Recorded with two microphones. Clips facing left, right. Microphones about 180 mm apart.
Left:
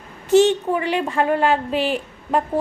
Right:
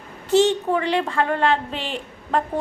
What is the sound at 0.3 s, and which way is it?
A woman's voice, 10° left (ahead or behind).